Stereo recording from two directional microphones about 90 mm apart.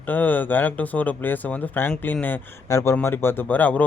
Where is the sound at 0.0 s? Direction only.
20° left (ahead or behind).